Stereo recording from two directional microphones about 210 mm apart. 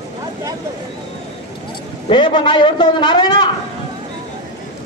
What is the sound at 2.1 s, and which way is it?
A man's voice, 20° left (ahead or behind).